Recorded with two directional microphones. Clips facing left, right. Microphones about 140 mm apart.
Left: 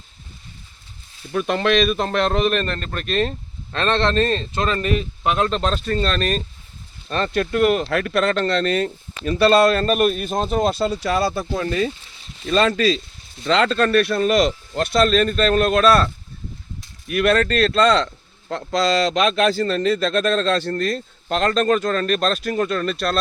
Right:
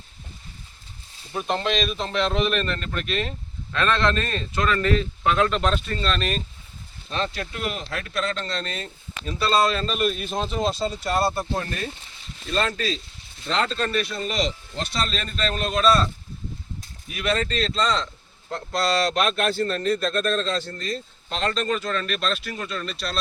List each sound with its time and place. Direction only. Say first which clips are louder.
1.3 s speech: left 6 dB; 75° left (ahead or behind); by 6.4 s 40° left (ahead or behind)
7.1 s speech: left 7 dB; 55° left (ahead or behind); by 11.3 s 90° left
12.5 s speech: left 8 dB; 90° left; by 16.0 s 65° left (ahead or behind)
17.1 s speech: left 8 dB; 60° left (ahead or behind)
18.5 s speech: left 4 dB; 90° left; by 23.1 s 50° left (ahead or behind)